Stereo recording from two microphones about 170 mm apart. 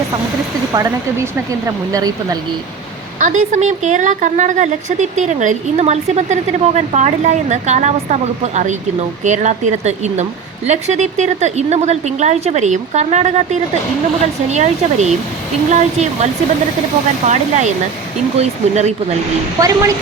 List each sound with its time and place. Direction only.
0.7 s speech: 20° right (ahead or behind)
3.2 s a woman's voice: 50° right (ahead or behind)
19.5 s speech: 20° right (ahead or behind)